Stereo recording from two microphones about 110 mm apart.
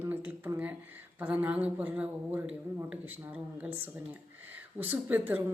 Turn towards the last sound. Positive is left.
turn(degrees=-15)  # may be behind; listen again after turning